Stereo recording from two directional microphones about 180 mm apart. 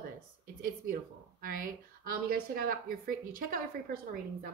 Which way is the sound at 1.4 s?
50° right (ahead or behind).